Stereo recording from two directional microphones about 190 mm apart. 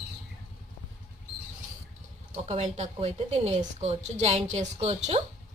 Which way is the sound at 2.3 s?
30° right (ahead or behind).